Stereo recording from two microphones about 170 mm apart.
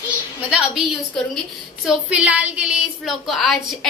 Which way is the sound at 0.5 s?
5° right (ahead or behind).